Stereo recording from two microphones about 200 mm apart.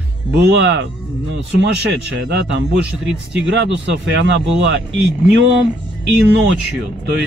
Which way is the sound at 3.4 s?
60° right (ahead or behind).